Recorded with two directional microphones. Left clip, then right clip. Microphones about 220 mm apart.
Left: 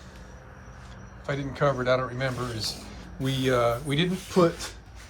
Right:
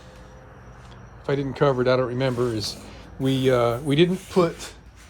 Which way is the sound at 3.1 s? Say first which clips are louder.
Right 7 dB; 30° right (ahead or behind).